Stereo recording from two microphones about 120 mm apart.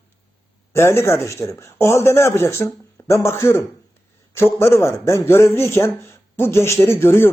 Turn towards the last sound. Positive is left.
turn(degrees=20)  # may be behind; listen again after turning